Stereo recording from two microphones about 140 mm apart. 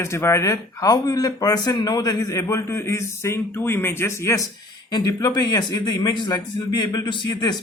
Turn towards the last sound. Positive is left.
turn(degrees=30)  # may be behind; listen again after turning